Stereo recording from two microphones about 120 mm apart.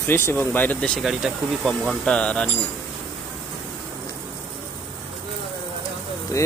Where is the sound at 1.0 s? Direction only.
Centre (ahead or behind).